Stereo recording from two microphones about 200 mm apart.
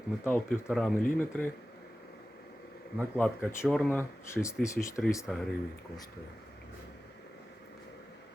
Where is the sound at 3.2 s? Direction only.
10° left (ahead or behind).